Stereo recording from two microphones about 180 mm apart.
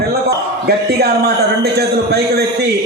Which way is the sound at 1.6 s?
65° right (ahead or behind).